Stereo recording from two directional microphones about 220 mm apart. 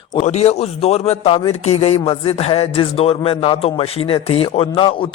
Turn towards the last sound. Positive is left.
turn(degrees=25)  # may be behind; listen again after turning